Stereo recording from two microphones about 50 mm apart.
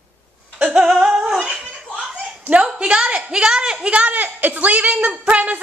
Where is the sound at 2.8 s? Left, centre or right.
Right.